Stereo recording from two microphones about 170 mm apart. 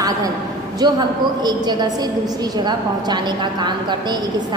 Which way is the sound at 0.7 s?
25° right (ahead or behind).